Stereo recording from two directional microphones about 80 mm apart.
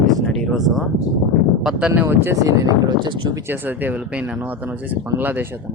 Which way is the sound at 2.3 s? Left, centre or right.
Right.